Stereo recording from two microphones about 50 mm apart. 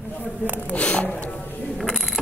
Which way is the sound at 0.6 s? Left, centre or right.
Left.